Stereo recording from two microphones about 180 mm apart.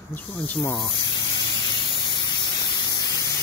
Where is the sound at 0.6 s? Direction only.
25° left (ahead or behind).